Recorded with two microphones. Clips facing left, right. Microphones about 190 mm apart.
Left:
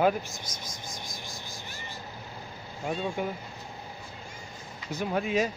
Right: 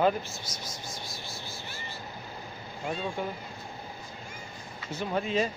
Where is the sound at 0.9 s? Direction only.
15° left (ahead or behind).